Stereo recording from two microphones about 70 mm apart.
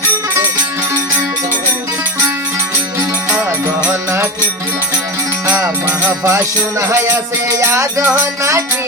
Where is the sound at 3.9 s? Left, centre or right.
Right.